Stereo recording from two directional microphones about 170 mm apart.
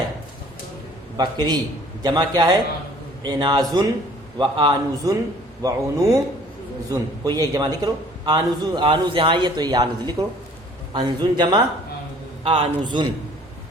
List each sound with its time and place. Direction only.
1.1 s a man's voice: 25° right (ahead or behind)